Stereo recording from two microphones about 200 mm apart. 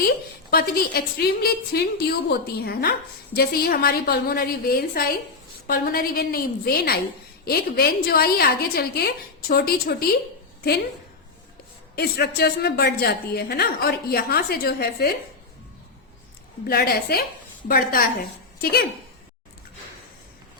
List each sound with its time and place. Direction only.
0.5 s a woman's voice: 50° left (ahead or behind)
11.9 s a woman's voice: 55° left (ahead or behind)
16.6 s a woman's voice: 50° left (ahead or behind)